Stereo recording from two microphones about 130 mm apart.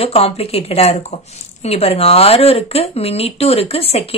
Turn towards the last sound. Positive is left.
turn(degrees=50)  # may be behind; listen again after turning